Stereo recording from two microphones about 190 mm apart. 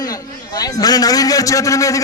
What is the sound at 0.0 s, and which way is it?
A man's voice, 20° left (ahead or behind).